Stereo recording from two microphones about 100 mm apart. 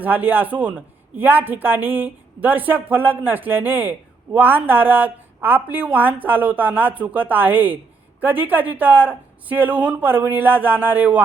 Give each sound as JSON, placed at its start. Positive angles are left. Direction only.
{"t": 0.0, "sound": "a woman's voice", "side_deg": -15}